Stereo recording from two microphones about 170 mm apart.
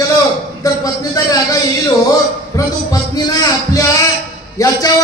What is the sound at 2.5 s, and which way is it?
A man's voice, 20° left (ahead or behind).